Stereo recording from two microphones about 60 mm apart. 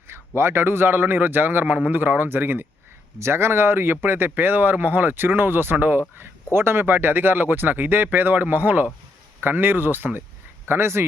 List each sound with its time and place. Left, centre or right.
0.1 s speech: right
3.2 s speech: right